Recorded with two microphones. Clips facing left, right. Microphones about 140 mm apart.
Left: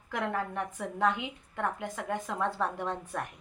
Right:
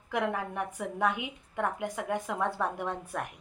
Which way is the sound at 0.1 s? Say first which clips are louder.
Right 1 dB; 15° right (ahead or behind).